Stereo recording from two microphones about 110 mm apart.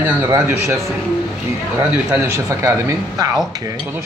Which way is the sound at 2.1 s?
20° right (ahead or behind).